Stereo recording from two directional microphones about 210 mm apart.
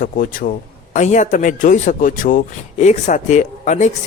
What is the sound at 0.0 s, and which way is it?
Speech, 40° left (ahead or behind).